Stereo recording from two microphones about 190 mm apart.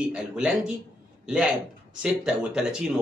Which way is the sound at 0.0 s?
5° right (ahead or behind).